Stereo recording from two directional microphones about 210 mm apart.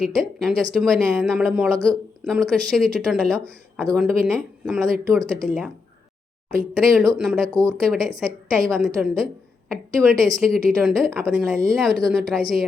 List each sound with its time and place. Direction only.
0.0 s speech: centre (ahead or behind)
6.7 s speech: centre (ahead or behind)
7.5 s speech: 15° right (ahead or behind)
7.8 s speech: 5° left (ahead or behind)